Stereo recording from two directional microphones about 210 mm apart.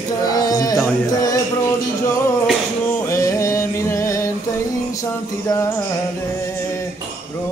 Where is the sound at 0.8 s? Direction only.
15° left (ahead or behind).